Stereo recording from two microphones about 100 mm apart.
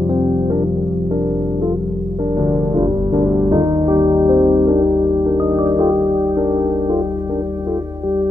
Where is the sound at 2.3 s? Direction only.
35° right (ahead or behind).